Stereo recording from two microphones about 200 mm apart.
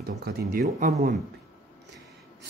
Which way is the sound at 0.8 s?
40° right (ahead or behind).